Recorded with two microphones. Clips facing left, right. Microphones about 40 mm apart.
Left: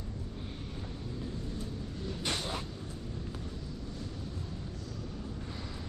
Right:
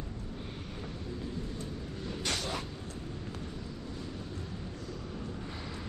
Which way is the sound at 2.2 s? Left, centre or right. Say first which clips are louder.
Even; left.